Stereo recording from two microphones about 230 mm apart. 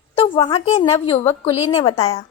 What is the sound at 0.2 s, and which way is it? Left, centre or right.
A woman's voice, left.